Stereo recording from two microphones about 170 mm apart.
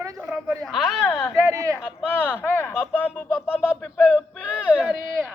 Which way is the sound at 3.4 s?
5° right (ahead or behind).